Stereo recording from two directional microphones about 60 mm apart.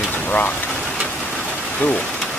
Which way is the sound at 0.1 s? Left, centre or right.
Left.